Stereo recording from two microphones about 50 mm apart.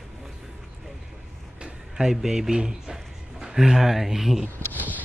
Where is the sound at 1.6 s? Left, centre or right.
Centre.